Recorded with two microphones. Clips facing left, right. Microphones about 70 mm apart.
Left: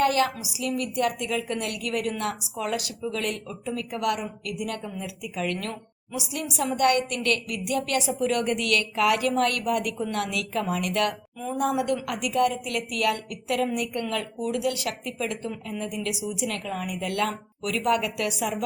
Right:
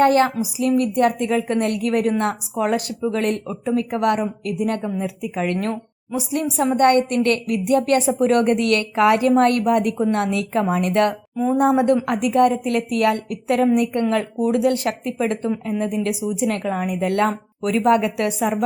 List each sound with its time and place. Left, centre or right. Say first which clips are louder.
0.0 s speech: right 7 dB; right